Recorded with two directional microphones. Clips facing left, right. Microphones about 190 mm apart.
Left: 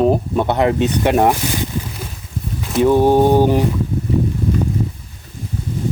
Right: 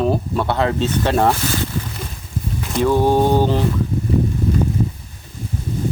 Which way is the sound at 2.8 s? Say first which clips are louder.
Left 3 dB; 15° left (ahead or behind).